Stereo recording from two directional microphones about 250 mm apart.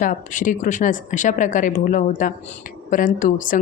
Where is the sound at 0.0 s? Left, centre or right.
Left.